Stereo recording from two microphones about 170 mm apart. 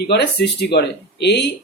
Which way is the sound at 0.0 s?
75° left (ahead or behind).